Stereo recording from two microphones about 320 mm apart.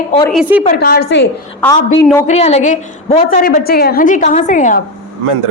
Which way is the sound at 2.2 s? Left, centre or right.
Left.